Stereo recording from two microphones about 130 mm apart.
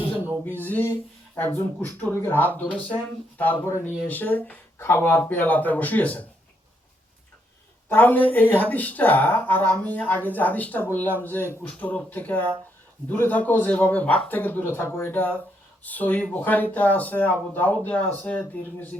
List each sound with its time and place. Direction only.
0.4 s speech: 15° left (ahead or behind)
7.9 s speech: 15° left (ahead or behind)